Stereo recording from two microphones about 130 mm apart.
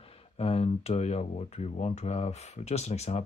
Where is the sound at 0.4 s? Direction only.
50° left (ahead or behind).